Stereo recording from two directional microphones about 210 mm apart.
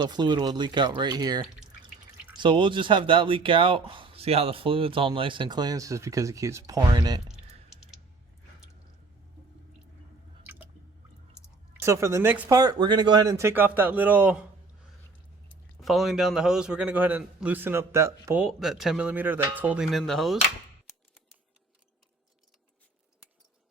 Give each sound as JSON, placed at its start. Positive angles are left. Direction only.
{"t": 0.0, "sound": "speech", "side_deg": -20}
{"t": 10.4, "sound": "squish", "side_deg": -10}
{"t": 11.8, "sound": "speech", "side_deg": -15}
{"t": 15.8, "sound": "a man's voice", "side_deg": 0}
{"t": 18.4, "sound": "a man's voice", "side_deg": 0}